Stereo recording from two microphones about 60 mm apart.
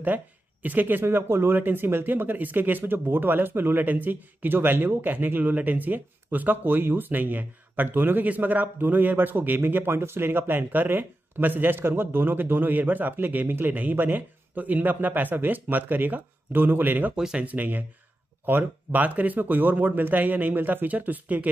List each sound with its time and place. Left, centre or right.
0.0 s speech: right
1.0 s speech: right
17.1 s speech: centre
17.5 s speech: right